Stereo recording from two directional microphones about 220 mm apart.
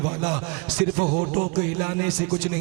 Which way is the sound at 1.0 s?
30° right (ahead or behind).